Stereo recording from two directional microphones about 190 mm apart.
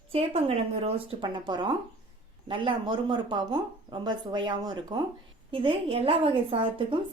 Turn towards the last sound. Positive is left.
turn(degrees=-25)  # may be behind; listen again after turning